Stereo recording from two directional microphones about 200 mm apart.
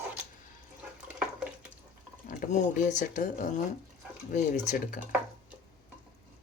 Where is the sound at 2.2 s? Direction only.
40° left (ahead or behind).